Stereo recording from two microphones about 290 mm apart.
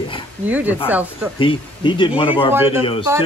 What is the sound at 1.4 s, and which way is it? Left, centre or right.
Speech, centre.